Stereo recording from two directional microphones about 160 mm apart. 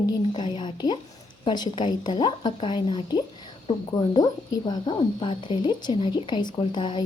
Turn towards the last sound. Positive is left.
turn(degrees=30)  # may be behind; listen again after turning